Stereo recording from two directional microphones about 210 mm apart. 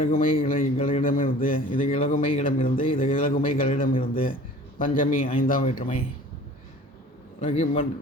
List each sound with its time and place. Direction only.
0.4 s a man's voice: 40° left (ahead or behind)
7.4 s a man's voice: 35° left (ahead or behind)